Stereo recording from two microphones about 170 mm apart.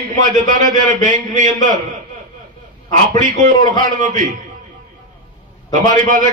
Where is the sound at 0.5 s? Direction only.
50° right (ahead or behind).